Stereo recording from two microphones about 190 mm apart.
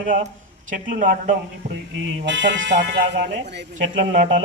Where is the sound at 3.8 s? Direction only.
40° right (ahead or behind).